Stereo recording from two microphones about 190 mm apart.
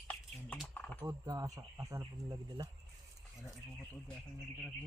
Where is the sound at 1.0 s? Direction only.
15° right (ahead or behind).